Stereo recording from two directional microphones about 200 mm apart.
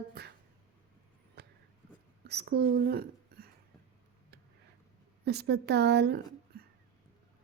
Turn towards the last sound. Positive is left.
turn(degrees=-55)  # may be behind; listen again after turning